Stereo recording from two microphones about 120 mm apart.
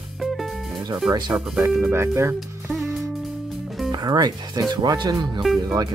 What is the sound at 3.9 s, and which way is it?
Speech, 35° right (ahead or behind).